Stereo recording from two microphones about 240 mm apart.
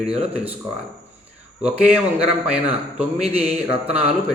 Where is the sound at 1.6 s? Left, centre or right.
Centre.